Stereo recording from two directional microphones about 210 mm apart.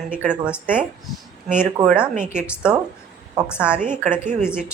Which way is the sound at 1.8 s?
5° right (ahead or behind).